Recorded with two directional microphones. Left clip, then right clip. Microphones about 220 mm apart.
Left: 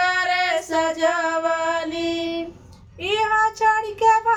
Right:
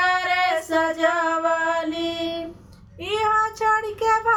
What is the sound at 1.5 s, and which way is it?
Mantra, 15° left (ahead or behind).